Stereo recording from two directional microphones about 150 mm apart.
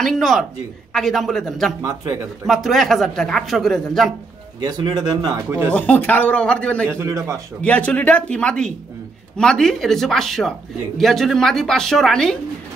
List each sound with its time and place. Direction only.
0.0 s speech: centre (ahead or behind)
4.6 s speech: 30° right (ahead or behind)
5.7 s a man's voice: 10° left (ahead or behind)
6.9 s speech: 15° right (ahead or behind)
7.6 s a man's voice: 10° left (ahead or behind)